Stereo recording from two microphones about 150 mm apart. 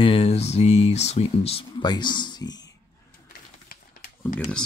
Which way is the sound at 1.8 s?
30° left (ahead or behind).